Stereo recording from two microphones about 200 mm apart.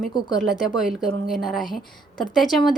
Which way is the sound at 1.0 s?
Centre (ahead or behind).